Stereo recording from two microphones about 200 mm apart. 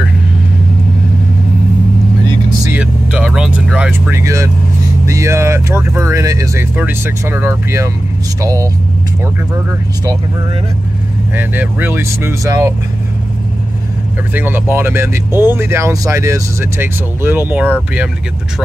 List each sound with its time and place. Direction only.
2.7 s vehicle: 5° right (ahead or behind)
5.0 s speech: 15° right (ahead or behind)
11.3 s speech: 10° right (ahead or behind)
14.3 s speech: 10° right (ahead or behind)